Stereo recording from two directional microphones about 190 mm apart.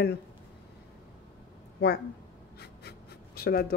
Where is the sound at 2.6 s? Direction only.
60° left (ahead or behind).